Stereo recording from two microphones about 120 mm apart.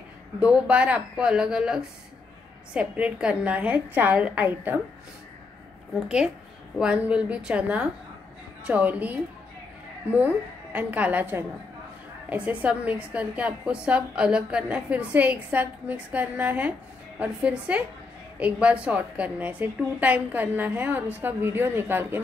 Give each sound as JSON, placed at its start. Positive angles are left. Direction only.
{"t": 0.4, "sound": "a woman's voice", "side_deg": -10}
{"t": 5.9, "sound": "a woman's voice", "side_deg": -5}